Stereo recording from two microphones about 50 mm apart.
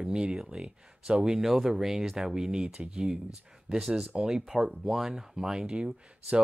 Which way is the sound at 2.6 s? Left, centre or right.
Right.